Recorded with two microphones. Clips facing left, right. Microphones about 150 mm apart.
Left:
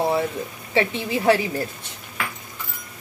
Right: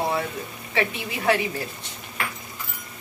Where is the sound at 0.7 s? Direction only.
30° left (ahead or behind).